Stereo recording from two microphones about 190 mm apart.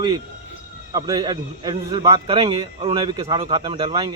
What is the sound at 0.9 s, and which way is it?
A man's voice, 20° right (ahead or behind).